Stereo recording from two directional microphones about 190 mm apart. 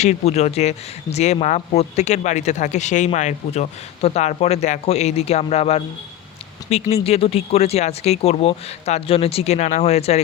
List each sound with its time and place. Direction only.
0.0 s speech: 35° left (ahead or behind)
6.9 s speech: 30° left (ahead or behind)